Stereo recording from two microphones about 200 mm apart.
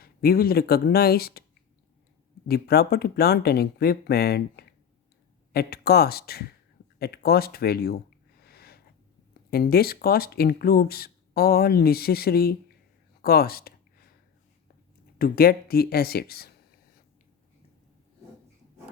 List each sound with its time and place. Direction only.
0.0 s speech: 50° left (ahead or behind)
2.5 s speech: 50° left (ahead or behind)
8.4 s a sound: 50° left (ahead or behind)
9.5 s speech: 50° left (ahead or behind)
15.2 s speech: 50° left (ahead or behind)